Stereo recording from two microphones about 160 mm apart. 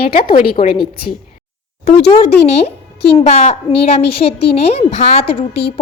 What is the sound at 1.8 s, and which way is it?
A woman's voice, 40° left (ahead or behind).